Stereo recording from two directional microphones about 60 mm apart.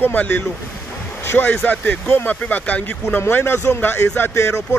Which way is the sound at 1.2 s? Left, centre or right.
Left.